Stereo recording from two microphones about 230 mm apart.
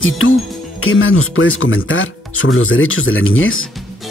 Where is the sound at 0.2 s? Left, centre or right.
Left.